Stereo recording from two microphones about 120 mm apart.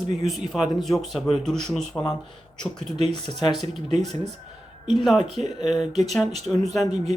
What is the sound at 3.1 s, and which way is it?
Speech, 40° left (ahead or behind).